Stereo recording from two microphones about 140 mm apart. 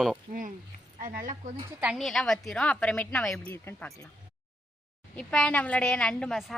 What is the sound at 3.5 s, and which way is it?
Speech, 15° left (ahead or behind).